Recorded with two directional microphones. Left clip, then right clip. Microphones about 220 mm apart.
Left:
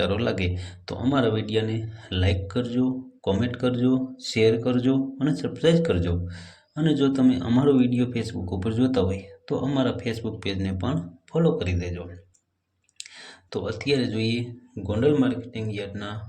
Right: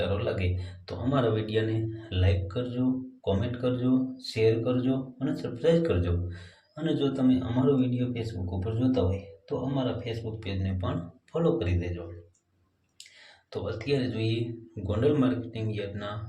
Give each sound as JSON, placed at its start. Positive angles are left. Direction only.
{"t": 0.0, "sound": "a man's voice", "side_deg": 30}
{"t": 13.5, "sound": "a man's voice", "side_deg": 25}